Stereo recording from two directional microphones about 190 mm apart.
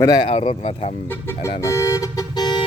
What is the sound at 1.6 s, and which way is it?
Vehicle, 15° left (ahead or behind).